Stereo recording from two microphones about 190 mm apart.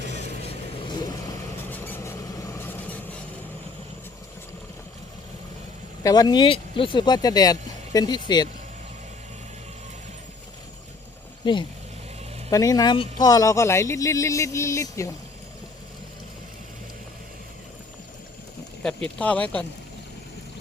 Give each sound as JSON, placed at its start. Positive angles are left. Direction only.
{"t": 0.1, "sound": "vehicle", "side_deg": 35}
{"t": 1.7, "sound": "vehicle", "side_deg": 10}
{"t": 6.0, "sound": "speech", "side_deg": 20}
{"t": 12.5, "sound": "speech", "side_deg": 20}
{"t": 18.8, "sound": "speech", "side_deg": 5}